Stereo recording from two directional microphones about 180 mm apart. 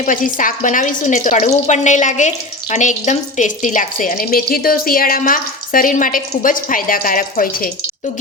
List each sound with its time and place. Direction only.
0.0 s speech: 45° left (ahead or behind)